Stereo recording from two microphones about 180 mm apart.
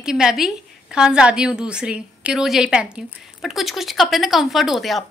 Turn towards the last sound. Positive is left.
turn(degrees=0)  # may be behind; listen again after turning